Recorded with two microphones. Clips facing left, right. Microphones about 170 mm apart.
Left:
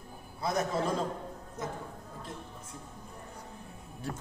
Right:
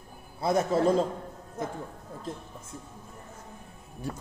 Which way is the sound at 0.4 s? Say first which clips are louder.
Right 5 dB; 30° right (ahead or behind).